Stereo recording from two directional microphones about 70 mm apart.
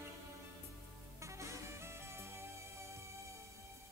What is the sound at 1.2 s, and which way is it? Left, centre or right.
Music, right.